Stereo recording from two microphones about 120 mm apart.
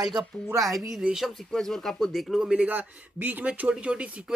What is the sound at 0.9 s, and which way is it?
Speech, 5° right (ahead or behind).